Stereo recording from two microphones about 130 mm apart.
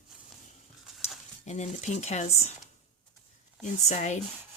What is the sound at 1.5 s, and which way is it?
Speech, 60° left (ahead or behind).